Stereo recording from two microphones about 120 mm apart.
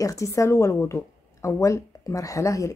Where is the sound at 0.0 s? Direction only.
25° left (ahead or behind).